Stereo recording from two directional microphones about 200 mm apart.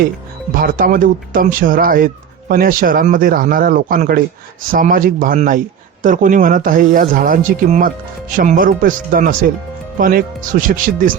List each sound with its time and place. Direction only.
0.5 s speech: 45° right (ahead or behind)